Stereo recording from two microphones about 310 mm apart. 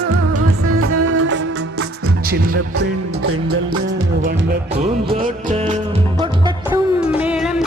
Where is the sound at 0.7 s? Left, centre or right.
Right.